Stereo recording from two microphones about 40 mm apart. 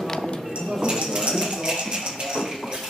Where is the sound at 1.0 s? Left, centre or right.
Centre.